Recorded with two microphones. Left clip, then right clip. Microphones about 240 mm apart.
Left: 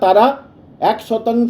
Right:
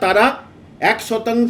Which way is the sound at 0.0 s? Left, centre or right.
Centre.